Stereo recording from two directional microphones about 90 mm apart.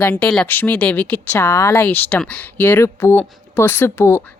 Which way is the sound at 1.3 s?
35° left (ahead or behind).